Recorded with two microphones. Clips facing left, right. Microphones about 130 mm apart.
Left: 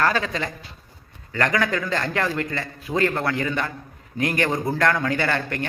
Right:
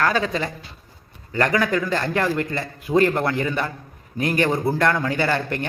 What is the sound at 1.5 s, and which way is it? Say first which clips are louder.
Speech: right 2 dB; 10° right (ahead or behind).